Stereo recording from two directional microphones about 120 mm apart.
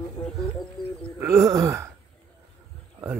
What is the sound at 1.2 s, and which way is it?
Speech, 25° right (ahead or behind).